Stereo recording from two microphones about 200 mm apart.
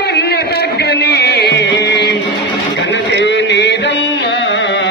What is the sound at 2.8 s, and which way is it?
Music, 60° left (ahead or behind).